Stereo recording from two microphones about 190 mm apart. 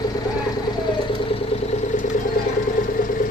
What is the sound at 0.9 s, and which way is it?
Vehicle, 25° left (ahead or behind).